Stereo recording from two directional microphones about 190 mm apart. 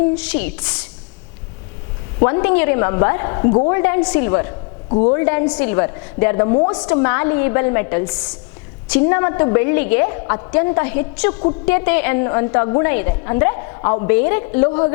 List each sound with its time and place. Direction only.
0.2 s a woman's voice: 10° left (ahead or behind)
2.2 s a woman's voice: 15° left (ahead or behind)
4.9 s a woman's voice: 35° left (ahead or behind)
5.1 s a woman's voice: 15° left (ahead or behind)
6.9 s a woman's voice: 15° left (ahead or behind)
14.1 s a woman's voice: 15° left (ahead or behind)